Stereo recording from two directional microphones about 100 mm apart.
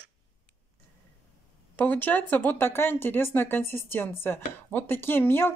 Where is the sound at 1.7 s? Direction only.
15° left (ahead or behind).